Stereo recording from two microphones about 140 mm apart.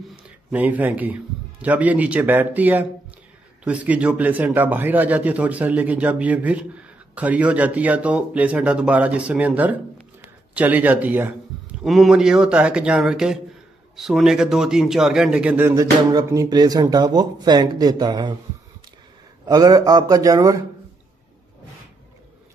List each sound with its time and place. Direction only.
0.1 s a man's voice: 10° right (ahead or behind)
11.8 s a man's voice: centre (ahead or behind); by 18.3 s 30° right (ahead or behind)
19.4 s a man's voice: 25° right (ahead or behind)